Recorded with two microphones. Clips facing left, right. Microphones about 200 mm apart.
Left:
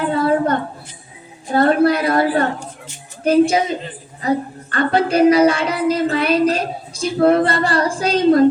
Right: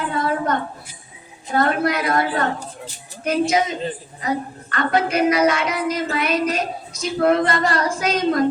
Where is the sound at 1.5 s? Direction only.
30° left (ahead or behind).